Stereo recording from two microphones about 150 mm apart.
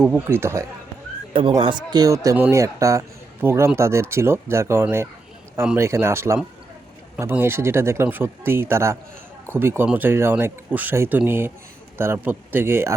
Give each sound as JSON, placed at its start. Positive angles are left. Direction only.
{"t": 0.0, "sound": "speech", "side_deg": -15}
{"t": 1.3, "sound": "speech", "side_deg": -35}